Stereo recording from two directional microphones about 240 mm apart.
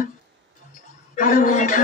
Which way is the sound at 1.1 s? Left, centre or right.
Left.